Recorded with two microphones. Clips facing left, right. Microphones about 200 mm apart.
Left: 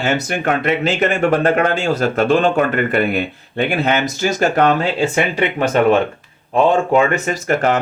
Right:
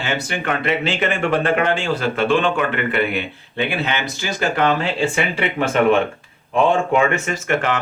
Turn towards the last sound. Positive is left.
turn(degrees=40)  # may be behind; listen again after turning